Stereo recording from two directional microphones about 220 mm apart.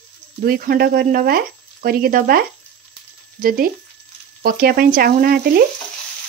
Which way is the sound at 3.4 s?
40° right (ahead or behind).